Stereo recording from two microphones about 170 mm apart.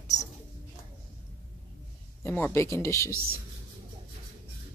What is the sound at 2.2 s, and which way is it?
Speech, 10° left (ahead or behind).